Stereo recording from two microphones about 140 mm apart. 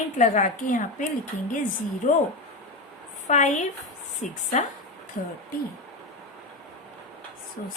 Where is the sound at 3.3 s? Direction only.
60° left (ahead or behind).